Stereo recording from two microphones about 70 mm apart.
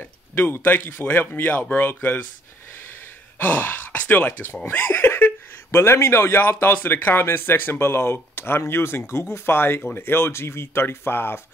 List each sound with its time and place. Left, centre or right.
0.0 s speech: left
3.3 s speech: left